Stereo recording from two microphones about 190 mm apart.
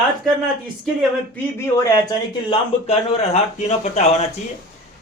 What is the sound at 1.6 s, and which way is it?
Speech, 15° left (ahead or behind).